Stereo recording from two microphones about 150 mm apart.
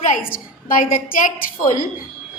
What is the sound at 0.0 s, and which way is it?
Speech, 55° left (ahead or behind).